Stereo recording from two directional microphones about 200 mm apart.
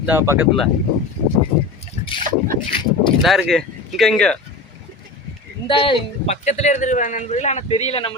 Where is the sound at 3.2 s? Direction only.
Centre (ahead or behind).